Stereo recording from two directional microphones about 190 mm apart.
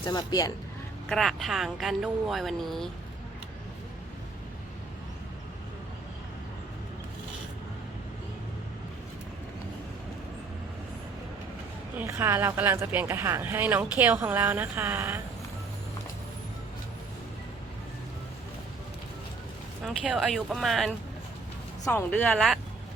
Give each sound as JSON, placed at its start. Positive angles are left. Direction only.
{"t": 0.0, "sound": "speech", "side_deg": 20}
{"t": 1.1, "sound": "speech", "side_deg": 0}
{"t": 11.9, "sound": "speech", "side_deg": -10}
{"t": 19.8, "sound": "speech", "side_deg": 0}
{"t": 21.8, "sound": "speech", "side_deg": 10}